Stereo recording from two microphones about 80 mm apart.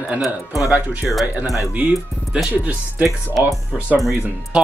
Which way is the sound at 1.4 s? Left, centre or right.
Left.